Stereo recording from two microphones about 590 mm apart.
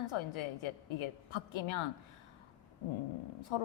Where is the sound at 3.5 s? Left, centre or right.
Left.